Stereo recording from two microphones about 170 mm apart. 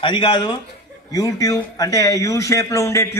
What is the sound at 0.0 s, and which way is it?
A man's voice, 30° left (ahead or behind).